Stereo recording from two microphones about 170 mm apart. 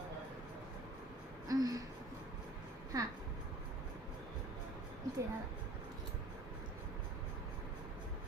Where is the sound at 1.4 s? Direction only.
20° right (ahead or behind).